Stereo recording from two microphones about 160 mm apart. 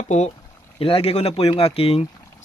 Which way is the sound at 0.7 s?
35° left (ahead or behind).